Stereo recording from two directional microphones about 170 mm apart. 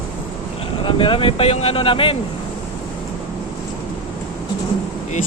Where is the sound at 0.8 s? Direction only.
30° left (ahead or behind).